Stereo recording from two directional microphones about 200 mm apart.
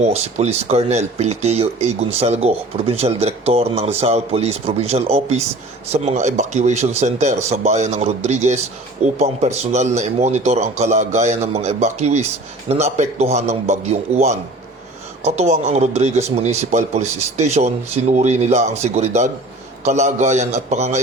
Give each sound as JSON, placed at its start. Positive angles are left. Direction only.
{"t": 0.0, "sound": "speech", "side_deg": -30}